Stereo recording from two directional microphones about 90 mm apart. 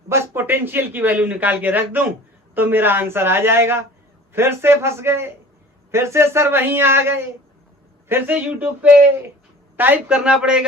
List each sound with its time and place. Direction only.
0.1 s a man's voice: 30° right (ahead or behind); by 10.7 s 10° right (ahead or behind)